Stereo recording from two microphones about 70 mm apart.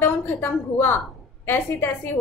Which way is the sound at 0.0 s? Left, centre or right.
Left.